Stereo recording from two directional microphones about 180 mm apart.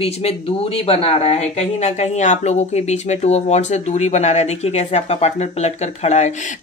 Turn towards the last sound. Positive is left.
turn(degrees=40)  # may be behind; listen again after turning